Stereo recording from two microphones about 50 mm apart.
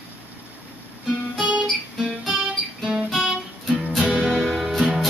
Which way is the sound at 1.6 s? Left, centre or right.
Centre.